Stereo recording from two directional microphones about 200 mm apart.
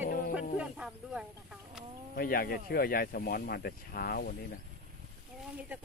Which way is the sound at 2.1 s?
45° left (ahead or behind).